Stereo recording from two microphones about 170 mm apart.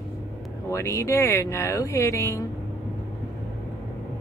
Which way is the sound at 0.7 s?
15° left (ahead or behind).